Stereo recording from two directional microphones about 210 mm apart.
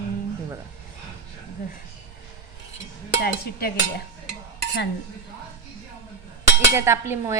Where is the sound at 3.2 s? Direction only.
50° left (ahead or behind).